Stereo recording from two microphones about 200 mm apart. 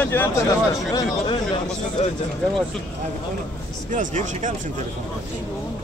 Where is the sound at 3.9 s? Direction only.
40° right (ahead or behind).